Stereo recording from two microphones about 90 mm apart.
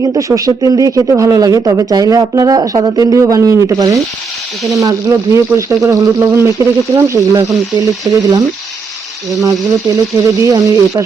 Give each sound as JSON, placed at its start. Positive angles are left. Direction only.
{"t": 0.0, "sound": "speech", "side_deg": -40}
{"t": 9.3, "sound": "speech", "side_deg": -40}